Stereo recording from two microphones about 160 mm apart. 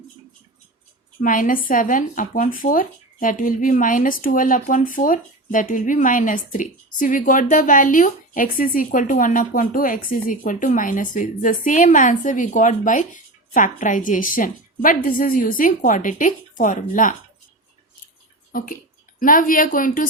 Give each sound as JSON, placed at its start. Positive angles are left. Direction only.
{"t": 1.2, "sound": "speech", "side_deg": 55}
{"t": 18.5, "sound": "speech", "side_deg": 60}